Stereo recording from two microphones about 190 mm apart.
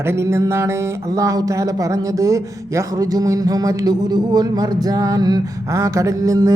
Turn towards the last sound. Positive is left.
turn(degrees=-20)  # may be behind; listen again after turning